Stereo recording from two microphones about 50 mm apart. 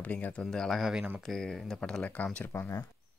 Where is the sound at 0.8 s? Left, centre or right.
Centre.